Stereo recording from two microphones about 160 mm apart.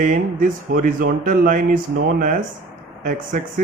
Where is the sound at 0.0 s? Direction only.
55° right (ahead or behind).